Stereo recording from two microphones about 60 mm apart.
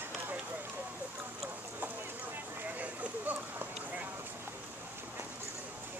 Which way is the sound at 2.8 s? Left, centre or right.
Right.